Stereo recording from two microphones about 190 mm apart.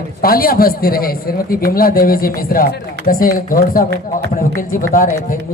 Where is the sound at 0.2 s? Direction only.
50° left (ahead or behind).